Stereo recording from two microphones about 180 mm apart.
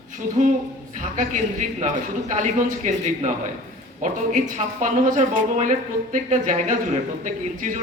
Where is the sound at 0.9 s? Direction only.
45° right (ahead or behind).